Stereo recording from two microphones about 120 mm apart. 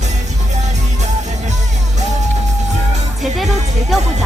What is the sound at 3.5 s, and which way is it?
Music, 70° right (ahead or behind).